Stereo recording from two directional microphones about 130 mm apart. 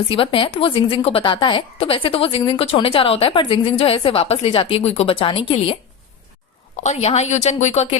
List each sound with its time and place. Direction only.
0.1 s a woman's voice: 40° left (ahead or behind)
6.8 s a woman's voice: 55° left (ahead or behind)